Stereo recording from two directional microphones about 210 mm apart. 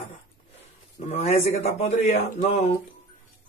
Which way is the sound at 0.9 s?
30° left (ahead or behind).